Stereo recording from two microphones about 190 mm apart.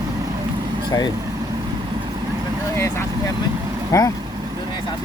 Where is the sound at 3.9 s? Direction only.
15° left (ahead or behind).